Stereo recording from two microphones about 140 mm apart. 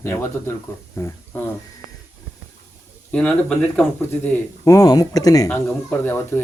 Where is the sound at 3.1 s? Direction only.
5° left (ahead or behind).